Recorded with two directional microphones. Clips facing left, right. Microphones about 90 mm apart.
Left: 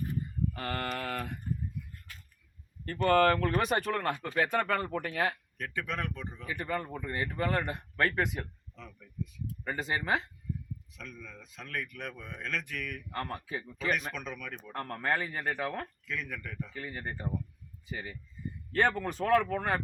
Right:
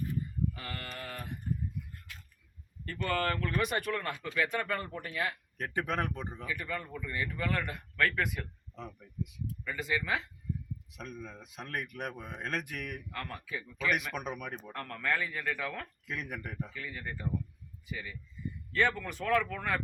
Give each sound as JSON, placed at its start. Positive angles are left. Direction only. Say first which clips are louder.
{"t": 0.5, "sound": "mantra", "louder": "left 8 dB", "side_deg": 55}
{"t": 2.8, "sound": "speech", "louder": "left 8 dB", "side_deg": 40}
{"t": 4.7, "sound": "speech", "louder": "left 5 dB", "side_deg": 55}
{"t": 5.5, "sound": "speech", "louder": "right 3 dB", "side_deg": -25}
{"t": 6.5, "sound": "speech", "louder": "left 5 dB", "side_deg": 35}
{"t": 8.7, "sound": "speech", "louder": "right 5 dB", "side_deg": -35}
{"t": 9.2, "sound": "speech", "louder": "left 2 dB", "side_deg": 35}
{"t": 10.9, "sound": "speech", "louder": "right 5 dB", "side_deg": -20}
{"t": 13.1, "sound": "speech", "louder": "left 4 dB", "side_deg": 35}
{"t": 14.2, "sound": "speech", "louder": "right 2 dB", "side_deg": -20}
{"t": 14.7, "sound": "speech", "louder": "left 3 dB", "side_deg": 30}
{"t": 16.0, "sound": "speech", "louder": "left 1 dB", "side_deg": -15}
{"t": 16.7, "sound": "speech", "louder": "left 2 dB", "side_deg": 40}